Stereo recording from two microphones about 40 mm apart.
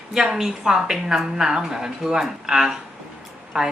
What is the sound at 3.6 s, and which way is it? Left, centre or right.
Speech, right.